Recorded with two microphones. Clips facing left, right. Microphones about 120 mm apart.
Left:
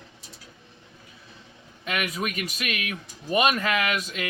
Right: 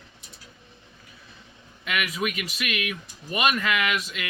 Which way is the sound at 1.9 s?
35° left (ahead or behind).